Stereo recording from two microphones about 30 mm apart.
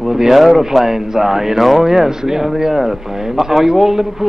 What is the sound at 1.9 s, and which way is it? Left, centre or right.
Speech, centre.